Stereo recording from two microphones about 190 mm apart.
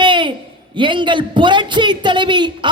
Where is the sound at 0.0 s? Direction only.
25° right (ahead or behind).